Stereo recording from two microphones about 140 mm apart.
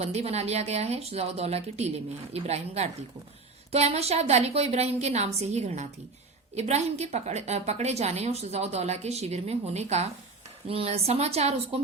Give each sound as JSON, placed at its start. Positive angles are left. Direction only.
{"t": 0.0, "sound": "a woman's voice", "side_deg": -50}